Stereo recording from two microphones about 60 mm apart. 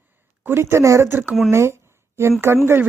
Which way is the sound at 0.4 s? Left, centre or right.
Right.